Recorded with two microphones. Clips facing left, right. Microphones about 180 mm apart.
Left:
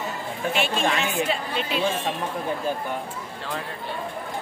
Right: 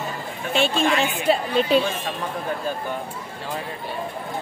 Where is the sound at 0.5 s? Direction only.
30° right (ahead or behind).